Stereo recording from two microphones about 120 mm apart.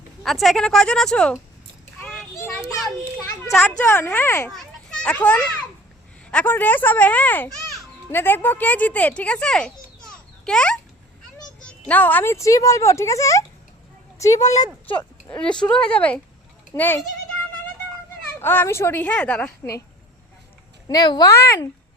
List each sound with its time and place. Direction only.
0.2 s a woman's voice: centre (ahead or behind)
3.8 s speech: 20° left (ahead or behind)
4.4 s a child's voice: 10° left (ahead or behind)
11.9 s speech: 15° left (ahead or behind)
14.3 s speech: 75° left (ahead or behind)
15.3 s speech: 10° left (ahead or behind)
18.3 s speech: 20° left (ahead or behind)
20.8 s speech: 35° left (ahead or behind)